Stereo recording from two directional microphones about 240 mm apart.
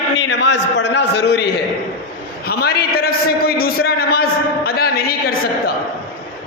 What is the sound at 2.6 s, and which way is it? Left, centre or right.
A man's voice, left.